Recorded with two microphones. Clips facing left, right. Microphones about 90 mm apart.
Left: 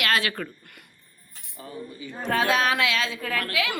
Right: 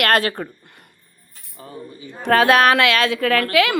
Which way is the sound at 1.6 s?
35° right (ahead or behind).